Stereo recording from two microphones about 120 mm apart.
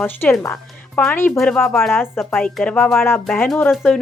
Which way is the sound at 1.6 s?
Centre (ahead or behind).